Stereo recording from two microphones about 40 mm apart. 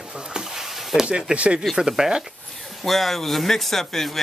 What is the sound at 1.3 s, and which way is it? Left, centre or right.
Speech, right.